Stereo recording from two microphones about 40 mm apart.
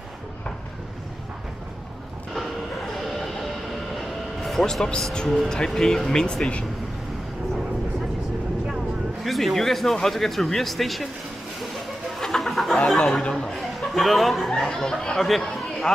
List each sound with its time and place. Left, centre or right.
3.0 s vehicle: centre
5.1 s speech: centre
9.2 s speech: centre
12.2 s a sound: centre
12.8 s speech: centre
14.7 s speech: centre